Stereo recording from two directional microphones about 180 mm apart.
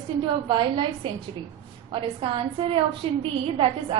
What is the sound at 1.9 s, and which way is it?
A woman's voice, 30° right (ahead or behind).